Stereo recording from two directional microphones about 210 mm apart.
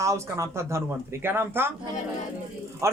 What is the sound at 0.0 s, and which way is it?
Speech, 15° right (ahead or behind).